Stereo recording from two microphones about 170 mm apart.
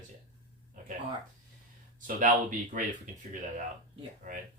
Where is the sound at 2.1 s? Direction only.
50° right (ahead or behind).